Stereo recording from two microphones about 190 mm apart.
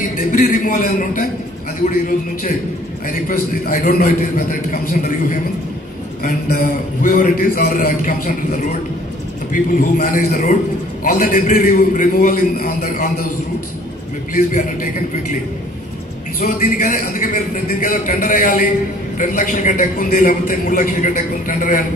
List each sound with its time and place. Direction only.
0.3 s a man's voice: 50° left (ahead or behind)
3.1 s a man's voice: 45° left (ahead or behind)
14.3 s a man's voice: 45° left (ahead or behind)
16.3 s a man's voice: 50° left (ahead or behind)